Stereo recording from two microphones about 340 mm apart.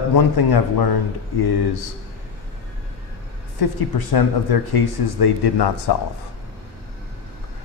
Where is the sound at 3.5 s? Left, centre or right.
Left.